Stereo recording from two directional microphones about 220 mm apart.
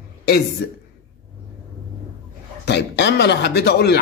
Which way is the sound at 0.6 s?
50° left (ahead or behind).